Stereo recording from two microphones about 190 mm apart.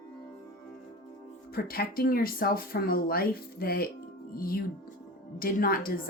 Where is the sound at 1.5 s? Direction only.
50° left (ahead or behind).